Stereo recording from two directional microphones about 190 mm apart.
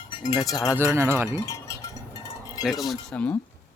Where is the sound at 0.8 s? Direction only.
15° right (ahead or behind).